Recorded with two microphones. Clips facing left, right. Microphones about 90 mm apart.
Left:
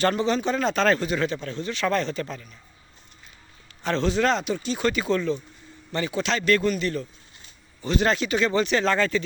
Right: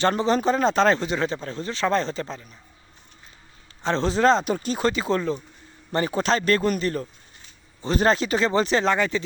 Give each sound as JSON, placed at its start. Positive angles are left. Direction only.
{"t": 0.0, "sound": "speech", "side_deg": -35}
{"t": 3.8, "sound": "speech", "side_deg": -30}
{"t": 8.8, "sound": "speech", "side_deg": -20}